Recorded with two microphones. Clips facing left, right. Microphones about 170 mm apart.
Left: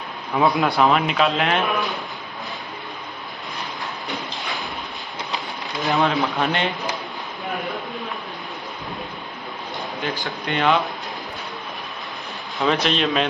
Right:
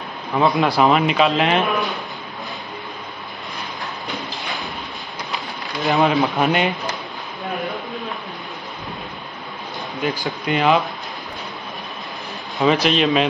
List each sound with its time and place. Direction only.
0.4 s a man's voice: centre (ahead or behind)
5.3 s speech: centre (ahead or behind)
10.2 s a man's voice: 5° right (ahead or behind)
12.5 s a man's voice: centre (ahead or behind)